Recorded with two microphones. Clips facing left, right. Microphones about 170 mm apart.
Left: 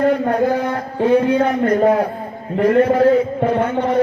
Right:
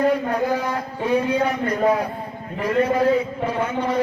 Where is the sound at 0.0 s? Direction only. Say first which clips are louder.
Left 4 dB; 55° left (ahead or behind).